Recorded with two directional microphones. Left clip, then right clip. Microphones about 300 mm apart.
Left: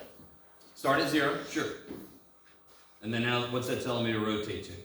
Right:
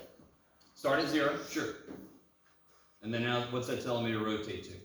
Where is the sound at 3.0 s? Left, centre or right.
Centre.